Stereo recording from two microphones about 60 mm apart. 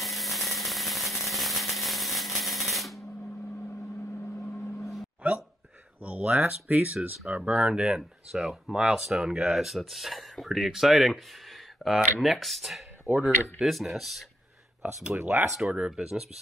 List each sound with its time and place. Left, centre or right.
0.0 s a sound: centre
4.2 s vehicle: left
6.0 s speech: right; by 11.1 s centre
11.8 s speech: centre
12.2 s speech: centre
13.1 s speech: centre
14.8 s speech: right
15.6 s speech: centre